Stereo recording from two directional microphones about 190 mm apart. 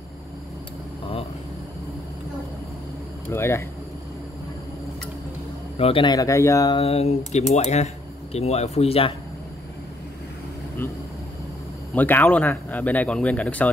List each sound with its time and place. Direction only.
3.3 s speech: 15° left (ahead or behind)
5.8 s speech: 30° left (ahead or behind)
6.8 s speech: 30° left (ahead or behind)
10.8 s speech: 10° left (ahead or behind)